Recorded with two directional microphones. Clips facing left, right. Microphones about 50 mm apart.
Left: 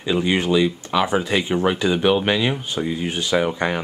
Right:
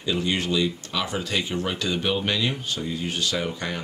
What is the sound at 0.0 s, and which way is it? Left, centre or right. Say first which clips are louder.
Speech: left 5 dB; left.